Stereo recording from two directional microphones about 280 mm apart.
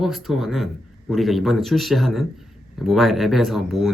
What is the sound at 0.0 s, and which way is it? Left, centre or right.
Speech, centre.